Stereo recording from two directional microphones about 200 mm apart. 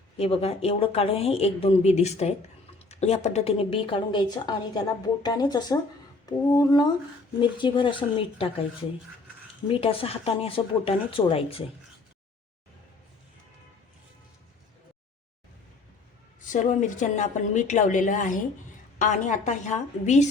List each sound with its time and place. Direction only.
0.2 s speech: 30° left (ahead or behind)
9.6 s speech: 30° left (ahead or behind)
16.4 s a woman's voice: 40° left (ahead or behind)